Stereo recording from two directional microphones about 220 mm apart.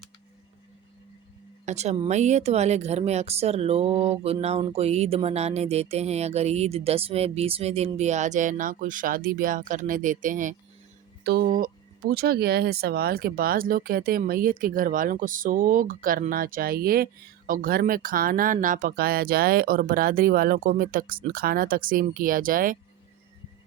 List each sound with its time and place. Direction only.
1.6 s speech: 30° right (ahead or behind)